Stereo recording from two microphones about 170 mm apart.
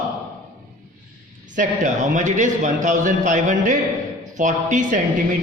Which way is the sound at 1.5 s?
45° right (ahead or behind).